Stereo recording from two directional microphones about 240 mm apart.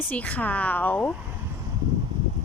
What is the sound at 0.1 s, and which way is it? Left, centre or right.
A woman's voice, centre.